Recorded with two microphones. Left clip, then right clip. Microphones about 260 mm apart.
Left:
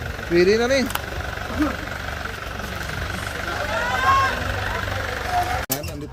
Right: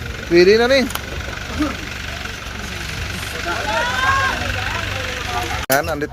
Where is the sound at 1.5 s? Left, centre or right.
Left.